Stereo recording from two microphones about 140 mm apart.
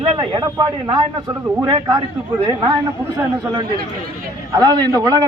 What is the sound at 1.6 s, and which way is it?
A man's voice, 30° right (ahead or behind).